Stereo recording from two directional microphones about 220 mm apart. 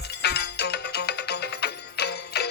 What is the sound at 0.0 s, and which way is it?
Music, 50° left (ahead or behind).